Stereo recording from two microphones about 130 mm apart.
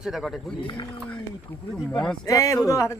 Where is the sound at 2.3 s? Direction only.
25° left (ahead or behind).